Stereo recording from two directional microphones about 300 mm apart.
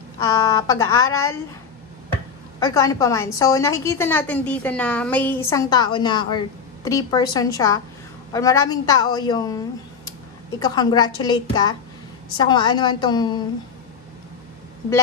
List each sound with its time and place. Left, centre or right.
0.3 s a woman's voice: centre
2.6 s a woman's voice: centre
10.6 s a woman's voice: centre